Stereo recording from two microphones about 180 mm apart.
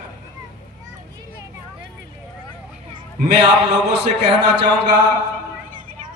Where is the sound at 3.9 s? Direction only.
70° right (ahead or behind).